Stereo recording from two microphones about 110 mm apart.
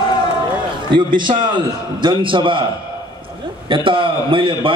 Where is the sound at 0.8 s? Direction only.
45° right (ahead or behind).